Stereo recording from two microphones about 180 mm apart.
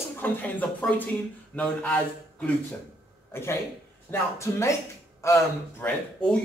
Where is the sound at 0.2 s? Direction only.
10° left (ahead or behind).